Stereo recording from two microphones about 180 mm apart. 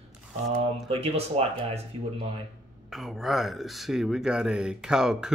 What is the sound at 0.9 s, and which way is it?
Speech, 35° right (ahead or behind).